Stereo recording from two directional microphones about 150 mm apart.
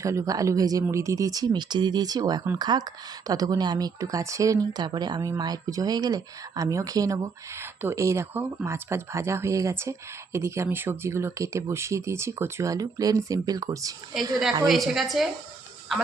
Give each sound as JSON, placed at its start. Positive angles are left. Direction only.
{"t": 0.0, "sound": "speech", "side_deg": -20}
{"t": 14.7, "sound": "a woman's voice", "side_deg": 0}